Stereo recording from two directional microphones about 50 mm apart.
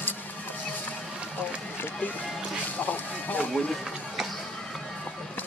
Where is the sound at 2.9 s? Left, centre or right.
Left.